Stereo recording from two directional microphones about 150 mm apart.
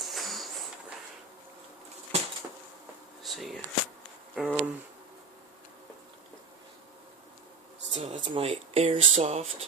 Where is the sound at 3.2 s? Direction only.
Centre (ahead or behind).